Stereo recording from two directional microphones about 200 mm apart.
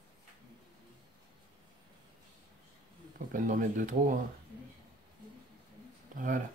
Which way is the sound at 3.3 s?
40° right (ahead or behind).